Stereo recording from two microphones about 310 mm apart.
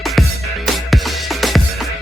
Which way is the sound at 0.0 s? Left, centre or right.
Centre.